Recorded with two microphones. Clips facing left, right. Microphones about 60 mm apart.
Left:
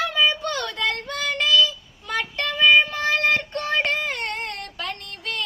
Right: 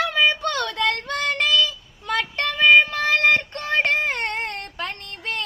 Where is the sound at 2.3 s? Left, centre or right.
Right.